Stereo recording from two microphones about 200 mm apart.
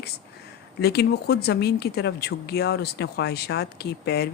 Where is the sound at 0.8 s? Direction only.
55° left (ahead or behind).